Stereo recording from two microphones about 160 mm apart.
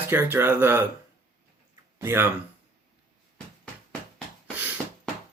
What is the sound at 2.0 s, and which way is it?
Speech, 15° right (ahead or behind).